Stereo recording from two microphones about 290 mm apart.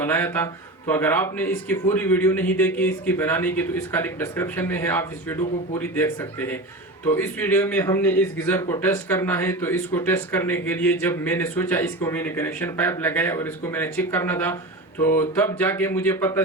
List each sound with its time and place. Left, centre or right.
0.0 s a man's voice: centre